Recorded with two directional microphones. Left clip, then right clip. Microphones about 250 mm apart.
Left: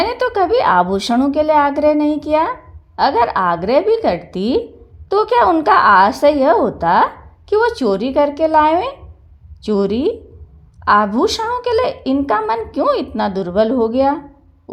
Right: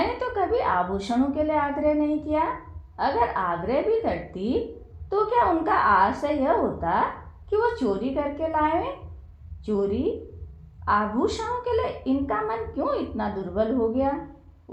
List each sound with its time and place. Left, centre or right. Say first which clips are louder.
0.2 s a woman's voice: left 10 dB; left